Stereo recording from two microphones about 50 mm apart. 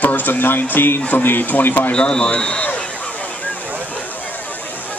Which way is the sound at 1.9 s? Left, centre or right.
Centre.